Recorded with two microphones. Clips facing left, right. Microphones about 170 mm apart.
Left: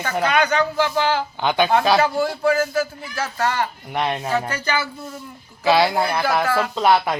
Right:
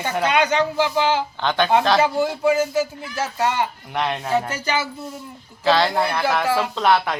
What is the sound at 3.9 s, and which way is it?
Speech, 10° left (ahead or behind).